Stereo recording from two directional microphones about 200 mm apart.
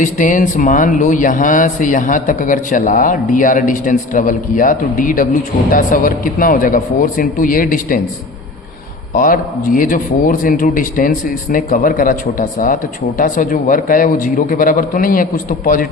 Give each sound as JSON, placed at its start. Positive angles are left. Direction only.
{"t": 0.0, "sound": "a man's voice", "side_deg": 40}
{"t": 9.1, "sound": "a man's voice", "side_deg": 40}